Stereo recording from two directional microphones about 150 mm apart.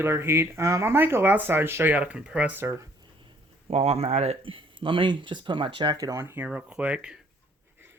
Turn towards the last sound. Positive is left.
turn(degrees=-10)  # may be behind; listen again after turning